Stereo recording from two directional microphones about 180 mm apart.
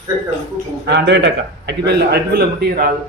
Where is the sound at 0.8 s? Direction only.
75° right (ahead or behind); by 2.9 s 55° right (ahead or behind).